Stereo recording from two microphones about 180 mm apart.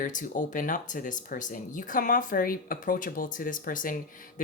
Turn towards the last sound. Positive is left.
turn(degrees=50)  # may be behind; listen again after turning